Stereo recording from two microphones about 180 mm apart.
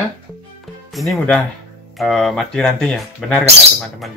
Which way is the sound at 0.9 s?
Centre (ahead or behind).